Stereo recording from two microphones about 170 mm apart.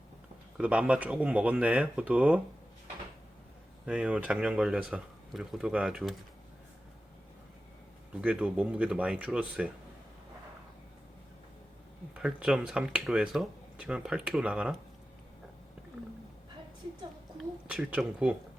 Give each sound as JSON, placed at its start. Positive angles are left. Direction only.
{"t": 0.5, "sound": "speech", "side_deg": -10}
{"t": 3.8, "sound": "speech", "side_deg": -5}
{"t": 8.1, "sound": "speech", "side_deg": -5}
{"t": 12.1, "sound": "speech", "side_deg": -5}
{"t": 17.7, "sound": "speech", "side_deg": -5}